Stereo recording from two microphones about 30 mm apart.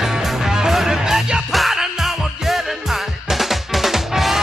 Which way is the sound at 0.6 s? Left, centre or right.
Centre.